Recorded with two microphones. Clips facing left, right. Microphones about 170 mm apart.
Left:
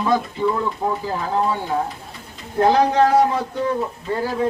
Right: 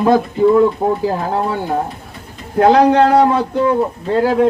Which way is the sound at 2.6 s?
70° right (ahead or behind).